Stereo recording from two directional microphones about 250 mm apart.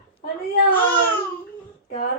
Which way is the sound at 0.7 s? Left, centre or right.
Centre.